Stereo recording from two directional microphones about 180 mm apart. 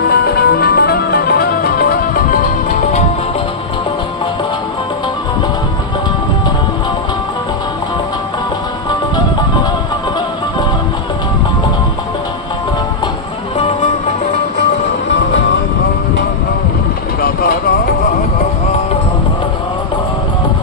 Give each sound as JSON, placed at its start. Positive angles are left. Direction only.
{"t": 0.1, "sound": "music", "side_deg": 60}
{"t": 17.2, "sound": "vehicle", "side_deg": 55}